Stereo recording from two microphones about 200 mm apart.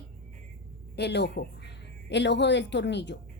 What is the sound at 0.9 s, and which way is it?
Speech, 55° left (ahead or behind).